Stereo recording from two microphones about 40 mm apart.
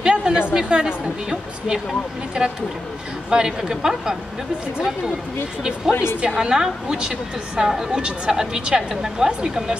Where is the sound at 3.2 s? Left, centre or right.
Centre.